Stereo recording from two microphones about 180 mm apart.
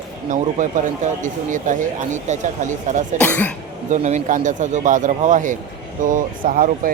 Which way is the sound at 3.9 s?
40° right (ahead or behind).